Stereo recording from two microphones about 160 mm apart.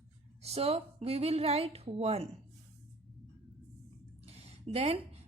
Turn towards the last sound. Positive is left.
turn(degrees=-40)  # may be behind; listen again after turning